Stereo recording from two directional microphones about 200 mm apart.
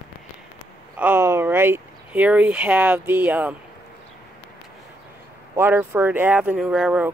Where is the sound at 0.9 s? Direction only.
10° right (ahead or behind).